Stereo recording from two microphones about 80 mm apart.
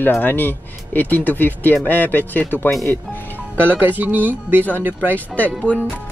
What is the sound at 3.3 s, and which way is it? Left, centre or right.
Speech, right.